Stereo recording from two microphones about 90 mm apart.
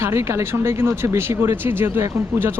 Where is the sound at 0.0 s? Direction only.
30° right (ahead or behind).